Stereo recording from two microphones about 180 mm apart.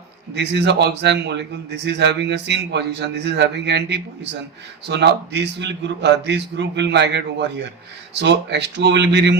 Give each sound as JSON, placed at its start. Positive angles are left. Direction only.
{"t": 0.3, "sound": "a man's voice", "side_deg": -70}